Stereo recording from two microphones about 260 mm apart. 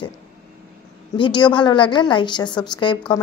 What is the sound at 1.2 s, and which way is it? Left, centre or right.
A woman's voice, centre.